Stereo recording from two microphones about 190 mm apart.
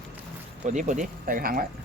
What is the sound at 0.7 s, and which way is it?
Speech, 40° right (ahead or behind).